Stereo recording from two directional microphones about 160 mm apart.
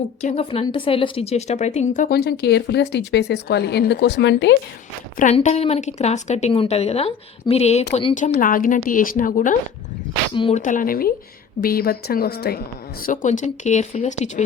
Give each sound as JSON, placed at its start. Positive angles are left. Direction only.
{"t": 0.2, "sound": "speech", "side_deg": 45}
{"t": 0.6, "sound": "speech", "side_deg": 30}
{"t": 2.4, "sound": "speech", "side_deg": 90}
{"t": 5.1, "sound": "speech", "side_deg": 50}
{"t": 8.3, "sound": "a woman's voice", "side_deg": 60}